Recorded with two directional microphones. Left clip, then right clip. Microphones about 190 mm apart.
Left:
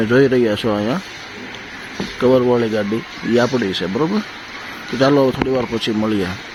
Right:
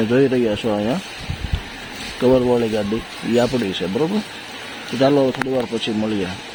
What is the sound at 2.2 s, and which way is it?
Speech, centre (ahead or behind).